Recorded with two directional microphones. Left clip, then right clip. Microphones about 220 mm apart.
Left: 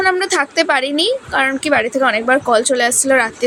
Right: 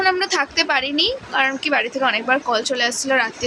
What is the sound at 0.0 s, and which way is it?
A woman's voice, 20° left (ahead or behind).